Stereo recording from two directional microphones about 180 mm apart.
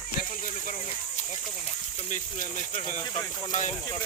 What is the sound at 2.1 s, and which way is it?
Speech, 45° left (ahead or behind).